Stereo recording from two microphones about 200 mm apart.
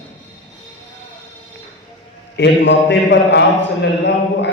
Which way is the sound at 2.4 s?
65° left (ahead or behind).